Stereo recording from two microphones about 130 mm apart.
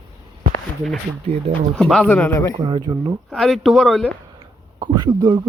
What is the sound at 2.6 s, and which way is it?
Speech, 35° right (ahead or behind).